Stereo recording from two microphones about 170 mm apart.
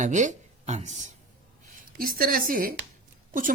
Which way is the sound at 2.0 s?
55° right (ahead or behind).